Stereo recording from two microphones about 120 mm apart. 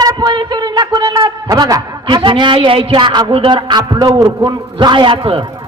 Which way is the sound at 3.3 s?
40° right (ahead or behind).